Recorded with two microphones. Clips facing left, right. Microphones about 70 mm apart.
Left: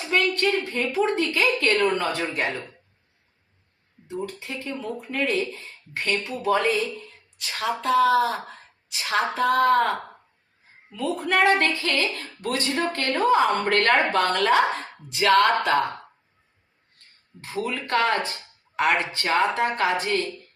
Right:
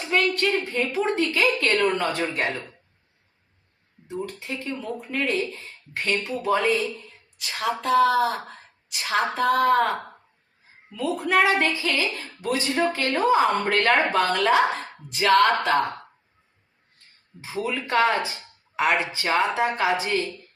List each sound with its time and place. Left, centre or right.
0.0 s a sound: centre
0.8 s a woman's voice: centre
4.1 s a woman's voice: centre
17.4 s a woman's voice: centre